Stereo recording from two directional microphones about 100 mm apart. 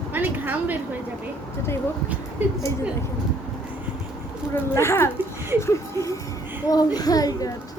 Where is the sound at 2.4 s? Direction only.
15° right (ahead or behind).